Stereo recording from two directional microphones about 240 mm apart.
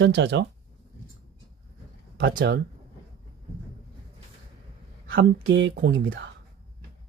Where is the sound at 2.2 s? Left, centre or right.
Right.